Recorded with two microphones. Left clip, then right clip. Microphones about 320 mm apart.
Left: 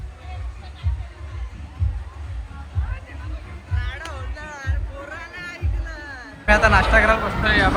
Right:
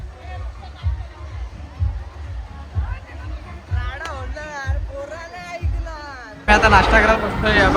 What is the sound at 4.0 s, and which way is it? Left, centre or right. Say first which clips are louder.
Music: right 4 dB; right.